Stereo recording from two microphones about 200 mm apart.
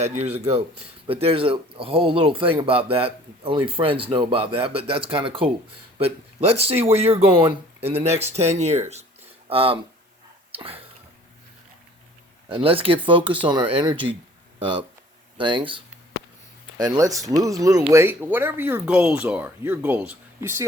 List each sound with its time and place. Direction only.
0.0 s speech: 30° right (ahead or behind)
10.5 s a sound: 30° right (ahead or behind)
12.5 s speech: 25° right (ahead or behind)